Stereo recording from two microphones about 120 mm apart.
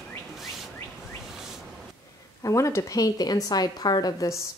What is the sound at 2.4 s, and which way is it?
A woman's voice, 25° left (ahead or behind).